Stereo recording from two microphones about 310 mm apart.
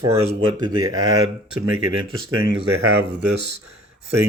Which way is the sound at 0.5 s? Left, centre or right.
Centre.